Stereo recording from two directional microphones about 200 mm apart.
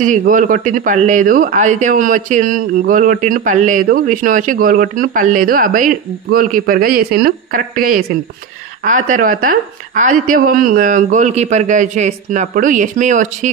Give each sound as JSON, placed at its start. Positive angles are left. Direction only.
{"t": 0.0, "sound": "speech", "side_deg": -40}